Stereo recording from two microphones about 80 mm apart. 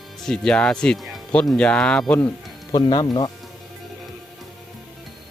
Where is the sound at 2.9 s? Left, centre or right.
Left.